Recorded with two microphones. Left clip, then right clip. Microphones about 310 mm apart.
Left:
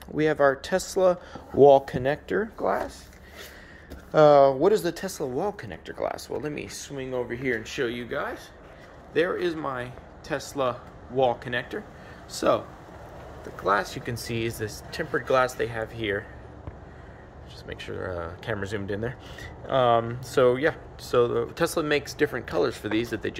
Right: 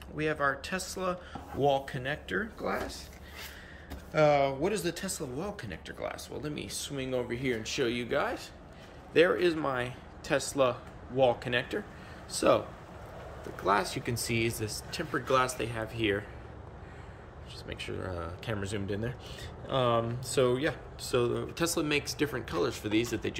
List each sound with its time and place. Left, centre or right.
0.2 s speech: left
4.1 s speech: centre
13.7 s speech: centre
17.6 s speech: centre